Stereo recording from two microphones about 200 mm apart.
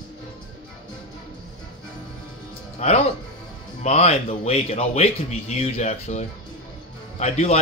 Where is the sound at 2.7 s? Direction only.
35° left (ahead or behind).